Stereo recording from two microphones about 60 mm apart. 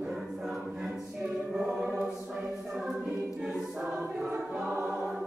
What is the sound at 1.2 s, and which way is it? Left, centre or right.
Choir, centre.